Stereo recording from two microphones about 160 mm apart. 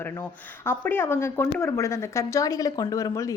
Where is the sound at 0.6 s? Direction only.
15° left (ahead or behind).